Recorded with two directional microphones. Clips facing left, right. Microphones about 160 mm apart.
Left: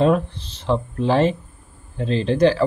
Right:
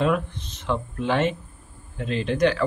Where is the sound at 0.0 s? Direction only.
35° left (ahead or behind).